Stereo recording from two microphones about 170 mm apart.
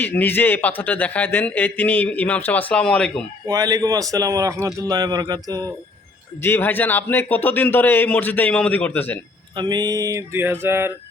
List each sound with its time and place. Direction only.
0.0 s a man's voice: 10° left (ahead or behind)
3.4 s a man's voice: 20° right (ahead or behind)
6.4 s a man's voice: 10° left (ahead or behind)
9.6 s a sound: 25° right (ahead or behind)